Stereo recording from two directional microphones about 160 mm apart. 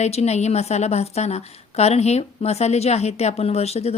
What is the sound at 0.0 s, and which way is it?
A woman's voice, 40° left (ahead or behind).